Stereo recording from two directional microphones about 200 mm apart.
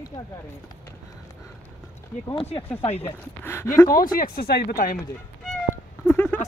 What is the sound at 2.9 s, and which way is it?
Speech, 10° left (ahead or behind).